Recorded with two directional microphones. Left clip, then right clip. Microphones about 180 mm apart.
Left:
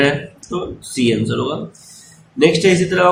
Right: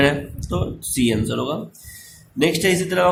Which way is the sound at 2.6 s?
Centre (ahead or behind).